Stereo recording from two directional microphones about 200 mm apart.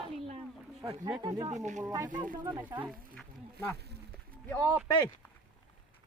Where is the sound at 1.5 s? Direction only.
35° right (ahead or behind).